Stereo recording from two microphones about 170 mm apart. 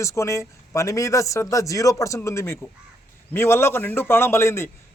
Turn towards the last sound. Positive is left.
turn(degrees=15)  # may be behind; listen again after turning